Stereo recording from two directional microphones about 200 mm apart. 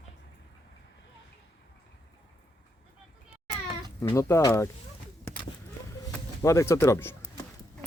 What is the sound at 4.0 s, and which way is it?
Speech, 15° left (ahead or behind).